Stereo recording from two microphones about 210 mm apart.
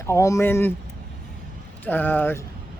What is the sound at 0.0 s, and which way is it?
Speech, 15° left (ahead or behind).